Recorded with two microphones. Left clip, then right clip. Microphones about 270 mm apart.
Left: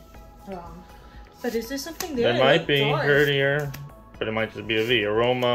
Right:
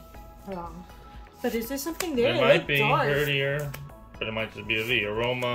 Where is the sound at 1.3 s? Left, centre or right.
Right.